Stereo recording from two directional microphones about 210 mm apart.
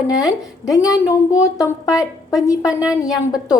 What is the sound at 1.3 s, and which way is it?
Speech, 15° left (ahead or behind).